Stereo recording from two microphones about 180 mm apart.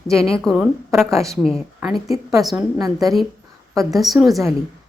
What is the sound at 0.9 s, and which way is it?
Speech, 15° right (ahead or behind).